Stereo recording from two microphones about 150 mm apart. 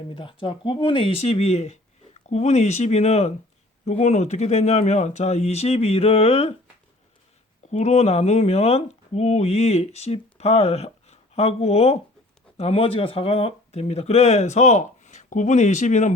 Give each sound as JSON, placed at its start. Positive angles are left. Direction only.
{"t": 0.1, "sound": "speech", "side_deg": 35}
{"t": 7.7, "sound": "speech", "side_deg": 45}